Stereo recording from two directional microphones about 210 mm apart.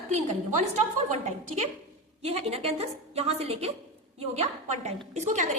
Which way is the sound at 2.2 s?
30° right (ahead or behind).